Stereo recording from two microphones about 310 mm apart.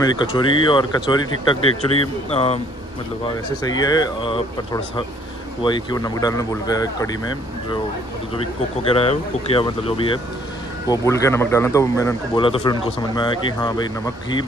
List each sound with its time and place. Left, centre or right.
0.0 s speech: centre
3.6 s speech: centre
5.6 s speech: centre
8.8 s speech: centre